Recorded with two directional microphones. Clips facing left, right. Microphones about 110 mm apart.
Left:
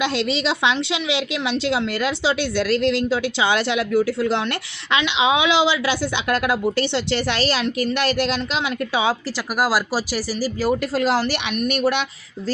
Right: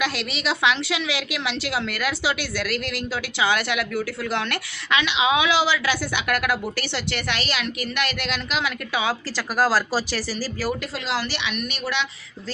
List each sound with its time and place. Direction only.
0.0 s a woman's voice: 25° left (ahead or behind)
9.6 s speech: 10° left (ahead or behind)
10.9 s speech: 45° left (ahead or behind)